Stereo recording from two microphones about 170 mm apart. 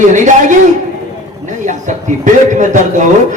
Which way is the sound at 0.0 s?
45° right (ahead or behind).